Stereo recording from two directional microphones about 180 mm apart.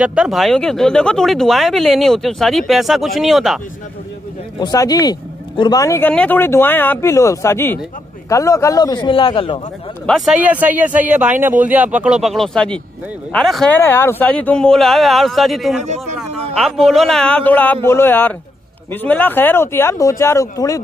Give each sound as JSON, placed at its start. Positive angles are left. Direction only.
{"t": 0.0, "sound": "speech", "side_deg": -5}
{"t": 4.6, "sound": "a man's voice", "side_deg": 20}
{"t": 10.0, "sound": "speech", "side_deg": 0}